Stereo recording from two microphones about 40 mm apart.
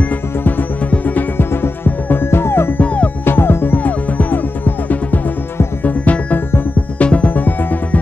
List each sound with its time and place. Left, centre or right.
0.4 s music: left
0.8 s music: left
1.4 s music: left
1.9 s music: left
2.3 s music: left
2.8 s music: left
3.3 s music: left
3.8 s music: left
5.9 s music: left
7.3 s music: left